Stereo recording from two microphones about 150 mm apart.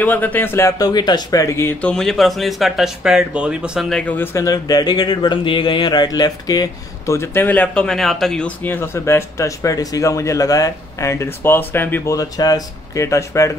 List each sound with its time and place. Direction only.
0.0 s speech: 10° left (ahead or behind); by 4.0 s 5° right (ahead or behind)
4.0 s speech: 10° left (ahead or behind)